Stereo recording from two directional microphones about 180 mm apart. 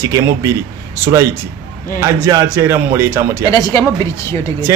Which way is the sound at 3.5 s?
15° left (ahead or behind).